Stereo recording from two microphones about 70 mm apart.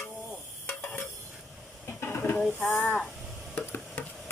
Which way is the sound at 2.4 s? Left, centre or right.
Centre.